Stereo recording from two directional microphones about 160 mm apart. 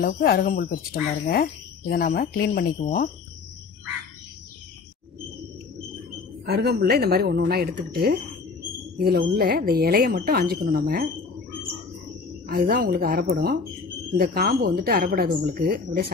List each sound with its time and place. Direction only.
0.0 s speech: 65° left (ahead or behind)
6.4 s speech: 85° right; by 11.1 s 65° right (ahead or behind)
12.4 s speech: 65° right (ahead or behind)